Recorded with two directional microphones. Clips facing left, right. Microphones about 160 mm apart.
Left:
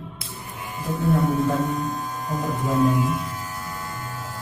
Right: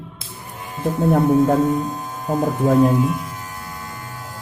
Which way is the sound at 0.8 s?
55° right (ahead or behind).